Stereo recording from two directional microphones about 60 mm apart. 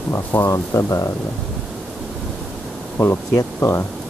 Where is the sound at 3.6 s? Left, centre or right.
Left.